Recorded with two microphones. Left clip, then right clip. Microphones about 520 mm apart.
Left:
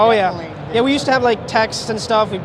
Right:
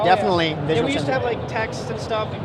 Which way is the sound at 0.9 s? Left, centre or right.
Left.